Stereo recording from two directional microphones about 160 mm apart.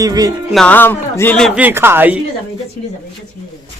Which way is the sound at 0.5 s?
5° left (ahead or behind).